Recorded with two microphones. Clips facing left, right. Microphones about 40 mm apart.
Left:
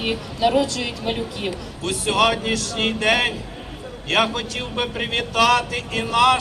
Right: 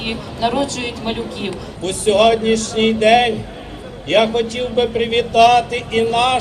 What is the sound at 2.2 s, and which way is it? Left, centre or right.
A woman's voice, centre.